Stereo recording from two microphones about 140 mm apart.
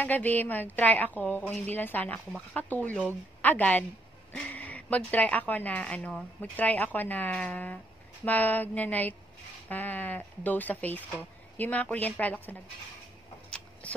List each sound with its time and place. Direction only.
0.0 s a woman's voice: 10° left (ahead or behind)